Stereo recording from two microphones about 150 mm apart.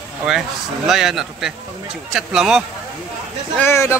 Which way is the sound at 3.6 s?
15° left (ahead or behind).